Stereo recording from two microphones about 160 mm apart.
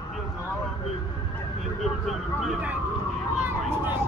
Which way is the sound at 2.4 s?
10° right (ahead or behind).